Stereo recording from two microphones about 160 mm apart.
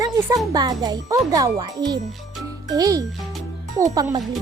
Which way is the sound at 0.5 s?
25° right (ahead or behind).